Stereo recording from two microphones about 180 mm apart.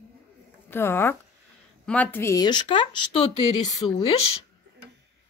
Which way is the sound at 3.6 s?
20° left (ahead or behind).